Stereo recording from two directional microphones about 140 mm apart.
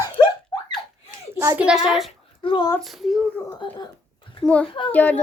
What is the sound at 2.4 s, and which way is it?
Speech, 35° left (ahead or behind).